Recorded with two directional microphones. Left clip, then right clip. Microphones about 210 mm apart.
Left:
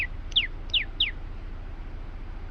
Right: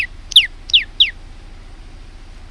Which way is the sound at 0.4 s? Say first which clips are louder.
Right 13 dB; 30° right (ahead or behind).